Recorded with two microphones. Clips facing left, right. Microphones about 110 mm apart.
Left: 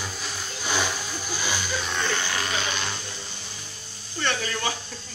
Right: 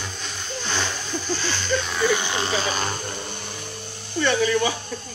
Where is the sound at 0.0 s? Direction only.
5° left (ahead or behind).